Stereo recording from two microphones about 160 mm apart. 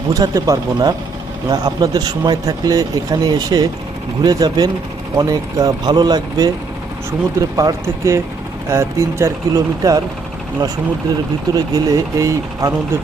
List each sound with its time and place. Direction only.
0.1 s speech: 20° right (ahead or behind)
11.5 s speech: 20° right (ahead or behind)